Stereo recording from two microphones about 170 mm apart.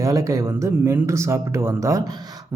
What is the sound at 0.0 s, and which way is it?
Speech, 20° right (ahead or behind).